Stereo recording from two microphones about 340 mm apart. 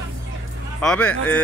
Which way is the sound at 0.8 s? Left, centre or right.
Centre.